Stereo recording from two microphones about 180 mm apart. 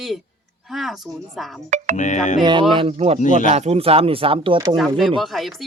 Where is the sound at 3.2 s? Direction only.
45° left (ahead or behind).